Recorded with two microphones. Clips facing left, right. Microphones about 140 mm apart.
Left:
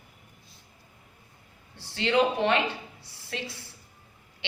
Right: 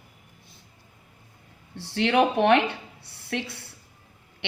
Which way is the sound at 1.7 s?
65° right (ahead or behind).